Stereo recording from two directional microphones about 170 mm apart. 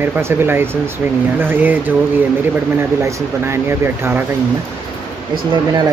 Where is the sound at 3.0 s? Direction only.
15° right (ahead or behind).